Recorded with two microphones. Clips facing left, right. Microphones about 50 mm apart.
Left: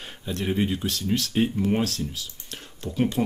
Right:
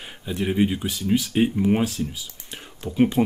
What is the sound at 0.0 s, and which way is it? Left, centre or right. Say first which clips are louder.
Speech: right 3 dB; centre.